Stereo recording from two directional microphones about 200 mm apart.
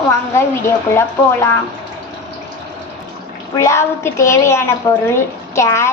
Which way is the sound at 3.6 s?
15° left (ahead or behind).